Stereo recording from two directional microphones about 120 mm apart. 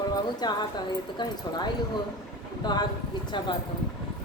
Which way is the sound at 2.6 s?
35° left (ahead or behind).